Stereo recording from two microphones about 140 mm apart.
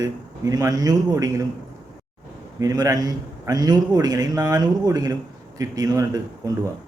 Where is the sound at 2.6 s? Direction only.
25° right (ahead or behind).